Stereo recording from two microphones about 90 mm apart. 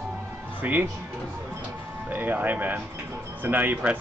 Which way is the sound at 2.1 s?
20° right (ahead or behind).